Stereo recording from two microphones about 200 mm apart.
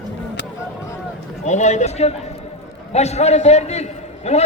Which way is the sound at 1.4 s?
35° left (ahead or behind).